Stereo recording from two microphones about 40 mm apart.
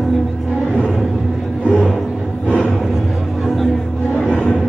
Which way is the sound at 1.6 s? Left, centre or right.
Right.